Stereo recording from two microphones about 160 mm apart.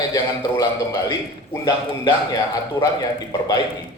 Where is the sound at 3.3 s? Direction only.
30° left (ahead or behind).